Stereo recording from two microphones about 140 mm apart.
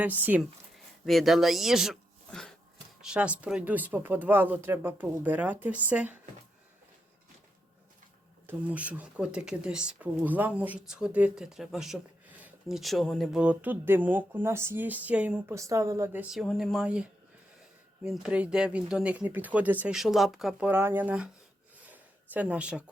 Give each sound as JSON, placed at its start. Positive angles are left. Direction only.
{"t": 0.0, "sound": "speech", "side_deg": -15}
{"t": 1.0, "sound": "speech", "side_deg": 0}
{"t": 8.4, "sound": "speech", "side_deg": -10}
{"t": 15.5, "sound": "a woman's voice", "side_deg": -20}
{"t": 16.3, "sound": "speech", "side_deg": 0}
{"t": 21.8, "sound": "a sound", "side_deg": -10}